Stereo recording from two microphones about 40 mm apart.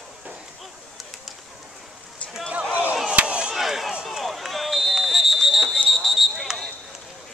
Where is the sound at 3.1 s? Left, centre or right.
Right.